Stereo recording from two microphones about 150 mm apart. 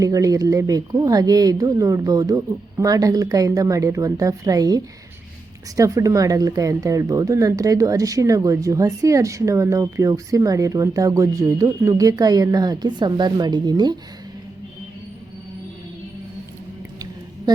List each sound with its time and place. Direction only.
0.0 s speech: 20° right (ahead or behind)